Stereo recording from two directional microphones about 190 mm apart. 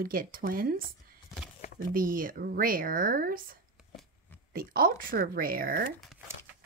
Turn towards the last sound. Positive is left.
turn(degrees=-50)  # may be behind; listen again after turning